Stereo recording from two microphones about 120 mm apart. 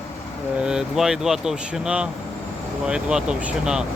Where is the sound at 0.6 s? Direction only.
5° right (ahead or behind).